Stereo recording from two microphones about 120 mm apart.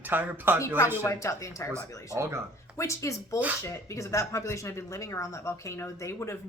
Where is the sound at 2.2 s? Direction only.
25° right (ahead or behind).